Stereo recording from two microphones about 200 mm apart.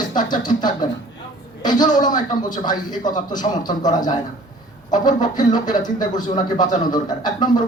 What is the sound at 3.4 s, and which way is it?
Speech, 20° left (ahead or behind).